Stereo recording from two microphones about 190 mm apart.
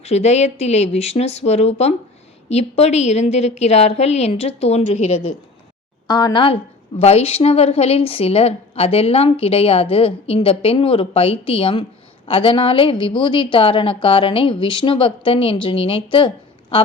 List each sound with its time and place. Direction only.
0.0 s a woman's voice: 35° left (ahead or behind)
6.1 s a woman's voice: 20° left (ahead or behind)